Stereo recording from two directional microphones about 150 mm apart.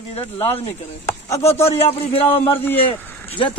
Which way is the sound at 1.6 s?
40° left (ahead or behind).